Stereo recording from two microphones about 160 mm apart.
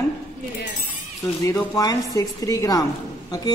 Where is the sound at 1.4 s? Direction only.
20° left (ahead or behind).